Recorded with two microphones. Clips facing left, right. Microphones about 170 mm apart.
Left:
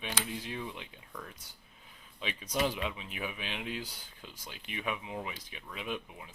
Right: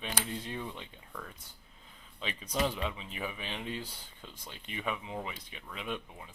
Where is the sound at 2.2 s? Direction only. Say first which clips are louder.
Even; 10° left (ahead or behind).